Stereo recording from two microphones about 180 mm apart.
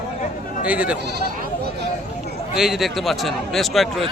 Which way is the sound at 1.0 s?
65° right (ahead or behind).